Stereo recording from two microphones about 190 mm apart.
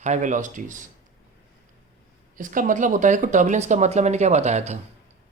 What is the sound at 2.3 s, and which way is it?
Speech, 45° right (ahead or behind).